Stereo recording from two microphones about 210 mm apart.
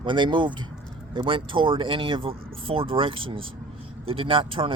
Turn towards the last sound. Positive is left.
turn(degrees=-25)  # may be behind; listen again after turning